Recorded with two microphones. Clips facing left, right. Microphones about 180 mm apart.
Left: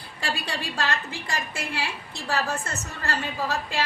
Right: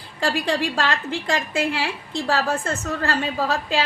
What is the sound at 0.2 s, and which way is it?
A woman's voice, 90° right.